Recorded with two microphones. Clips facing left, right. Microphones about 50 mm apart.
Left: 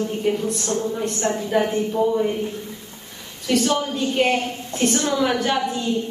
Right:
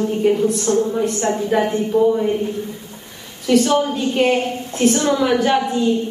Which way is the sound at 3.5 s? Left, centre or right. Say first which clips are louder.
Right 5 dB; centre.